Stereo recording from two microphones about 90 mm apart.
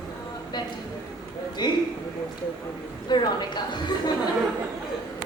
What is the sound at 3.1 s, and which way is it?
Speech, 55° left (ahead or behind).